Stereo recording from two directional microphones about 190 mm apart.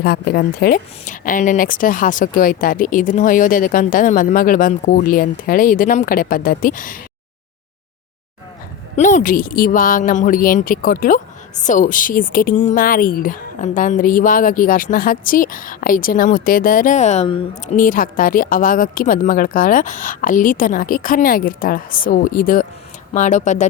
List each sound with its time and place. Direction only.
0.0 s speech: 55° left (ahead or behind)
9.0 s speech: 40° left (ahead or behind)